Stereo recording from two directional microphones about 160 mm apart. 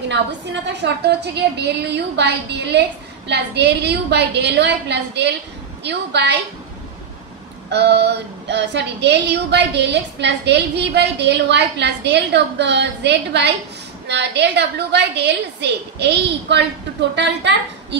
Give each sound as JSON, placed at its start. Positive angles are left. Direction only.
{"t": 0.1, "sound": "a woman's voice", "side_deg": -90}
{"t": 7.7, "sound": "a woman's voice", "side_deg": -90}